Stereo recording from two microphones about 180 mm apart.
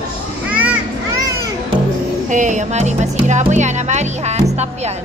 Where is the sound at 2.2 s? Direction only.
45° right (ahead or behind).